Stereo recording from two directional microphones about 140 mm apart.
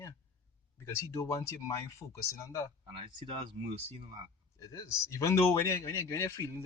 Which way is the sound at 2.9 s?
35° right (ahead or behind).